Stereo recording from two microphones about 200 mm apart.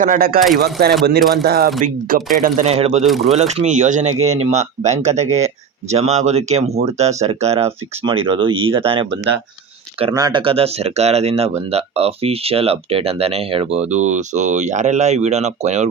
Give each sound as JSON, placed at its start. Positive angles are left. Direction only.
{"t": 0.0, "sound": "speech", "side_deg": -45}
{"t": 3.0, "sound": "speech", "side_deg": 0}
{"t": 3.2, "sound": "speech", "side_deg": -35}